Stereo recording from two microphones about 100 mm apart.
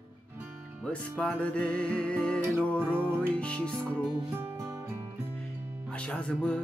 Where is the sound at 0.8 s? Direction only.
15° left (ahead or behind).